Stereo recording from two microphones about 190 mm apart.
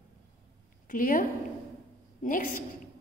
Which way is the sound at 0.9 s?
45° left (ahead or behind).